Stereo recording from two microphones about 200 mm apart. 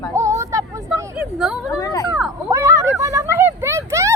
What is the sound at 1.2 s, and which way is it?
Speech, 5° right (ahead or behind).